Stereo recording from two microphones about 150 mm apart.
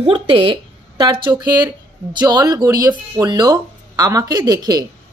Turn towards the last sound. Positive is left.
turn(degrees=-25)  # may be behind; listen again after turning